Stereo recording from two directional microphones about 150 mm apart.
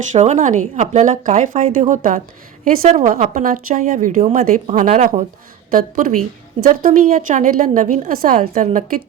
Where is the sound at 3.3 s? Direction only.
65° right (ahead or behind).